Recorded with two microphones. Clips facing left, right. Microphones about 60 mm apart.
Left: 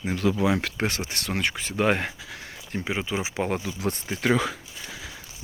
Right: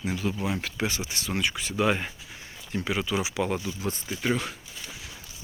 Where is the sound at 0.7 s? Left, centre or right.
Left.